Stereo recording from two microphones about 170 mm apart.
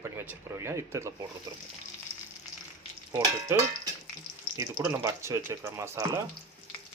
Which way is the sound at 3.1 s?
15° right (ahead or behind).